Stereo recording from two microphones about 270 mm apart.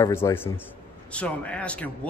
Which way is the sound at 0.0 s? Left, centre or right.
Centre.